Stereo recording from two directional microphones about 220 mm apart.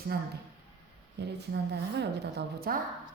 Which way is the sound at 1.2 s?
50° right (ahead or behind).